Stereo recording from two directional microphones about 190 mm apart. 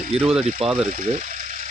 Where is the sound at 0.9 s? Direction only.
40° right (ahead or behind).